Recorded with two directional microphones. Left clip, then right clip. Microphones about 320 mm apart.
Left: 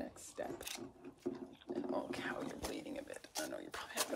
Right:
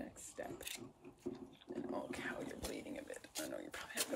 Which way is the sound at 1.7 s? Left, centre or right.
Centre.